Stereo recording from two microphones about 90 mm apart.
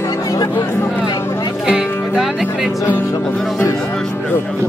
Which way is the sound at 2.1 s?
5° right (ahead or behind).